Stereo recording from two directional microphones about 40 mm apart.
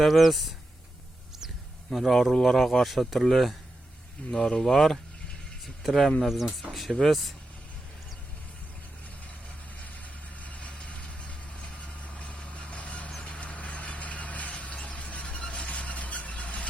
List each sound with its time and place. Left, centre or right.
0.0 s speech: centre
1.9 s a man's voice: centre
4.3 s speech: left
4.7 s a man's voice: centre
9.7 s vehicle: left
14.8 s squeal: left